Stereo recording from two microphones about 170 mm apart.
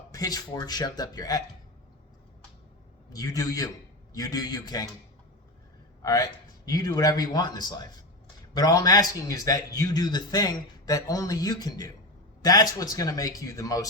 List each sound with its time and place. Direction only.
0.1 s a man's voice: 20° left (ahead or behind)
3.1 s a man's voice: 20° left (ahead or behind)
6.0 s a man's voice: 20° left (ahead or behind)